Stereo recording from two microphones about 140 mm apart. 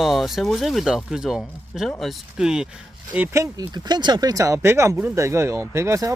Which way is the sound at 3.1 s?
20° right (ahead or behind).